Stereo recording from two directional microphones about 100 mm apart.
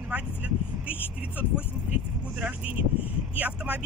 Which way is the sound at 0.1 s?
15° right (ahead or behind).